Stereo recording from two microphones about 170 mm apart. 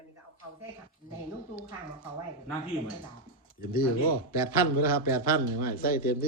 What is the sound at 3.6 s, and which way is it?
Speech, 60° left (ahead or behind).